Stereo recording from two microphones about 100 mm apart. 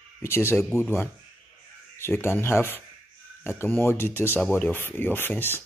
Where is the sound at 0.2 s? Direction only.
25° left (ahead or behind).